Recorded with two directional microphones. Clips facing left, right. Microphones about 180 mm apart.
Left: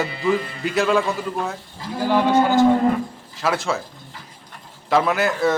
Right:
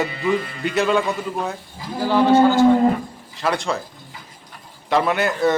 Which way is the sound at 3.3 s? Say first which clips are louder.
Even; centre (ahead or behind).